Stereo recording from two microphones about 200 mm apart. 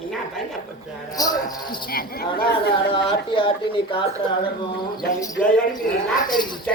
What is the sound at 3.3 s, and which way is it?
Speech, 25° left (ahead or behind).